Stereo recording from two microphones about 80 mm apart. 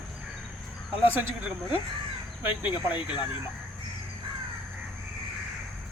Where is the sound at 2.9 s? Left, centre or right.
Left.